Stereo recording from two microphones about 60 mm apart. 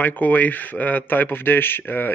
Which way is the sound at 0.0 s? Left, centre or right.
Left.